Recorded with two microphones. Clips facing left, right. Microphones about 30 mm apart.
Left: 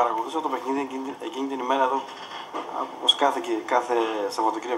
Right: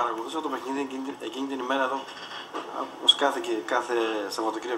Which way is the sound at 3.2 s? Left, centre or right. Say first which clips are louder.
Left 3 dB; centre.